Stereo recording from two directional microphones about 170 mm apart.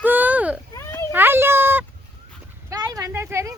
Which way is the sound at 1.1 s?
10° right (ahead or behind).